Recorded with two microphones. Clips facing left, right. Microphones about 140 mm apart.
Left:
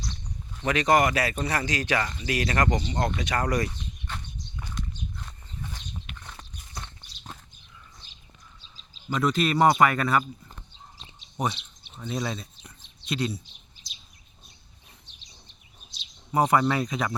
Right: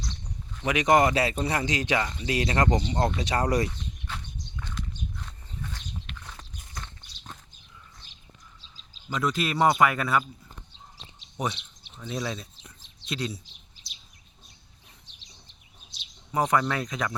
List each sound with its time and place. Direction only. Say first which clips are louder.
0.6 s speech: right 1 dB; 15° right (ahead or behind)
4.1 s walk: left 1 dB; 5° right (ahead or behind)
4.7 s horse: even; centre (ahead or behind)
6.1 s walk: even; 5° left (ahead or behind)
9.0 s speech: left 3 dB; centre (ahead or behind)
11.4 s speech: left 2 dB; centre (ahead or behind)
16.3 s speech: left 3 dB; 5° left (ahead or behind)